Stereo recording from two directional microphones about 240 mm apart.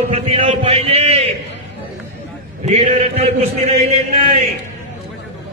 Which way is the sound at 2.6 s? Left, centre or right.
Right.